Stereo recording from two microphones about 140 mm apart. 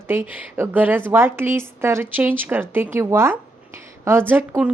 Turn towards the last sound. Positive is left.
turn(degrees=-10)  # may be behind; listen again after turning